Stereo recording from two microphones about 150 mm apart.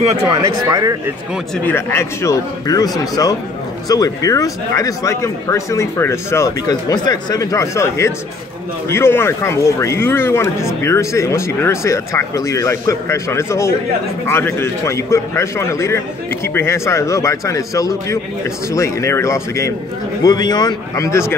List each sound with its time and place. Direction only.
0.3 s speech: 25° right (ahead or behind)
1.6 s a man's voice: 15° left (ahead or behind)
3.9 s a man's voice: 25° left (ahead or behind)